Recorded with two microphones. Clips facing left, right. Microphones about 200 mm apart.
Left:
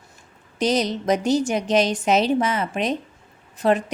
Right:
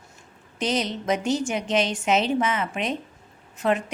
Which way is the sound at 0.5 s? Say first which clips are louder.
Left 5 dB; 40° left (ahead or behind).